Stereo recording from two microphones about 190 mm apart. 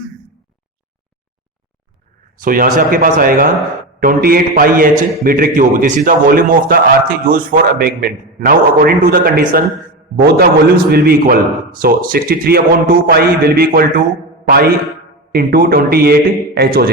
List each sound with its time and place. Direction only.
2.4 s a man's voice: 45° right (ahead or behind)
15.3 s a man's voice: 50° right (ahead or behind)